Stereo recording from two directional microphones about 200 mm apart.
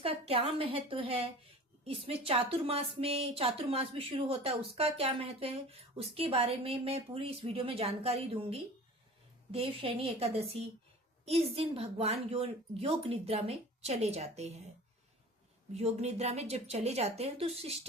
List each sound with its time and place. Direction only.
0.0 s a woman's voice: 30° right (ahead or behind)
15.7 s a woman's voice: 30° right (ahead or behind)